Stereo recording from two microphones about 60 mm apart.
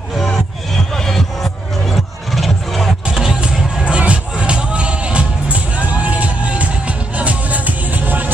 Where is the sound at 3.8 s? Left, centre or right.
Centre.